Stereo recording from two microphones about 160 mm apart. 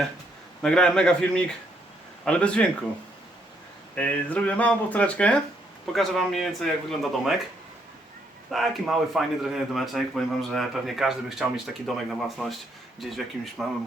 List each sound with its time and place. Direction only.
0.6 s a man's voice: 5° left (ahead or behind)
3.9 s a man's voice: 10° left (ahead or behind)
8.4 s a man's voice: centre (ahead or behind)